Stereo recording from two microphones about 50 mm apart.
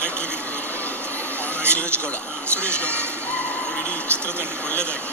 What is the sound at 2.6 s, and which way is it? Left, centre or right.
Speech, left.